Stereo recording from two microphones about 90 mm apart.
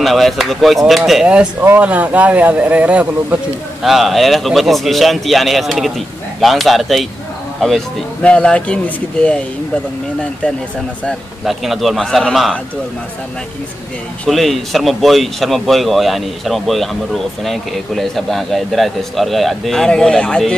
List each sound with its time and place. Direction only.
0.0 s speech: centre (ahead or behind); by 3.3 s 15° right (ahead or behind)
3.8 s speech: centre (ahead or behind)
8.2 s speech: 10° left (ahead or behind)
11.4 s speech: centre (ahead or behind)
14.2 s speech: centre (ahead or behind)